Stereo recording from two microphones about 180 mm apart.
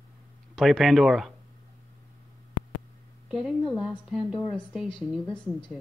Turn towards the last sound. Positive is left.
turn(degrees=5)  # may be behind; listen again after turning